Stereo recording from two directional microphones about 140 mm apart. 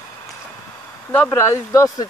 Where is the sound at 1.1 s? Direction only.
15° left (ahead or behind).